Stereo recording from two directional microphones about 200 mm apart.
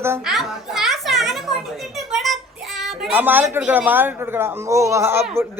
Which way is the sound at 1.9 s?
Centre (ahead or behind).